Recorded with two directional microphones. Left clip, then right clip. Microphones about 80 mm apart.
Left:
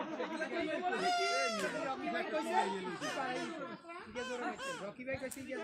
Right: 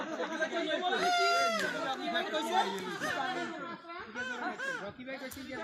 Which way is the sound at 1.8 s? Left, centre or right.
Left.